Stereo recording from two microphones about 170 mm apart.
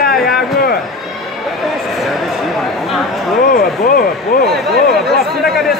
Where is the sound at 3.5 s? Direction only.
55° left (ahead or behind).